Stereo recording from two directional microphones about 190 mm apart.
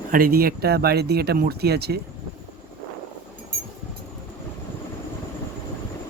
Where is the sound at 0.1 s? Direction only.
50° right (ahead or behind).